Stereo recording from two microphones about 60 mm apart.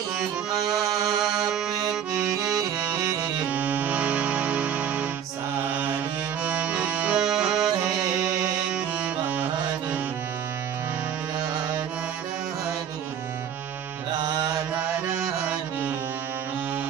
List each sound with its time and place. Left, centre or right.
1.2 s music: centre
1.9 s accordion: centre
3.5 s music: right
6.4 s accordion: right
7.2 s music: centre